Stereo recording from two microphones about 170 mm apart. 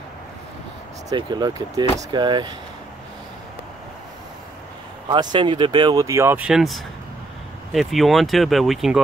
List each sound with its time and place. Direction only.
1.1 s speech: 25° right (ahead or behind)
5.0 s speech: 25° right (ahead or behind); by 9.0 s centre (ahead or behind)